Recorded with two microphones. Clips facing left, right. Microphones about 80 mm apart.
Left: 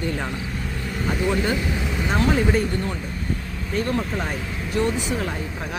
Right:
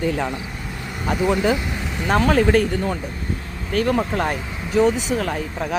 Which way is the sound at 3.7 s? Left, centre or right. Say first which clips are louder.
Right 4 dB; right.